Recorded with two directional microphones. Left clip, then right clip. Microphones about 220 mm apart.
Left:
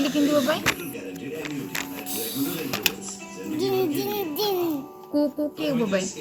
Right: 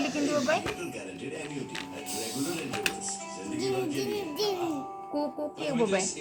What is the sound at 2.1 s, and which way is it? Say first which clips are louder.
Music: left 1 dB; 10° right (ahead or behind).